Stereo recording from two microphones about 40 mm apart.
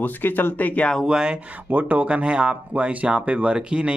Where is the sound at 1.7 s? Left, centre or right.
Right.